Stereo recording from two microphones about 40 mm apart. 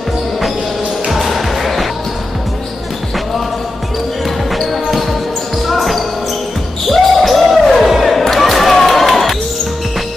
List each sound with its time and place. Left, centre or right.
1.1 s music: centre
4.5 s basketball bounce: centre
7.8 s music: centre